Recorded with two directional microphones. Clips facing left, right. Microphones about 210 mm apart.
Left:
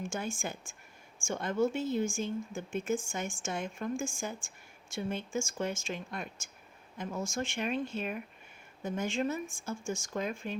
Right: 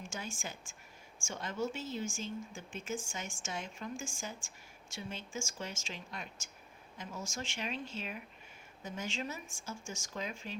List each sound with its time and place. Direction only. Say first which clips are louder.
0.0 s speech: left 7 dB; 55° left (ahead or behind)